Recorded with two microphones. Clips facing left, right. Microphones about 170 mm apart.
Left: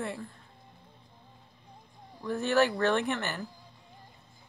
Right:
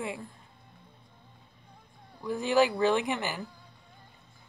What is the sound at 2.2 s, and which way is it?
Speech, 15° right (ahead or behind).